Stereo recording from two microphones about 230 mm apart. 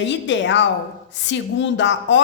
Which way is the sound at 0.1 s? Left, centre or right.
Left.